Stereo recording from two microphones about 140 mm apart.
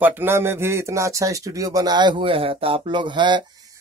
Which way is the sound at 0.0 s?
15° right (ahead or behind).